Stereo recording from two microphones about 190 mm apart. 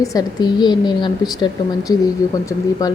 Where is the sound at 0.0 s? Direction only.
20° left (ahead or behind).